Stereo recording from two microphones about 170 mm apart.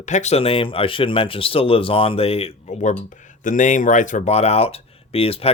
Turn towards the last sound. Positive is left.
turn(degrees=35)  # may be behind; listen again after turning